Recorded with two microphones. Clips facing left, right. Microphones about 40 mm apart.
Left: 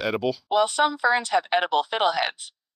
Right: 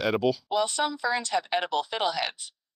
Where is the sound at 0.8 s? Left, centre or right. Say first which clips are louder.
Left 6 dB; left.